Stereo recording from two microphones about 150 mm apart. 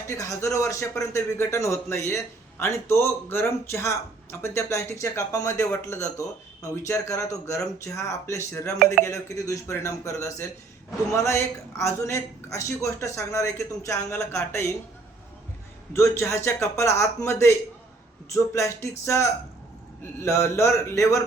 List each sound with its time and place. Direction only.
0.1 s speech: 20° left (ahead or behind)
15.9 s speech: 20° left (ahead or behind)
18.5 s speech: 20° left (ahead or behind)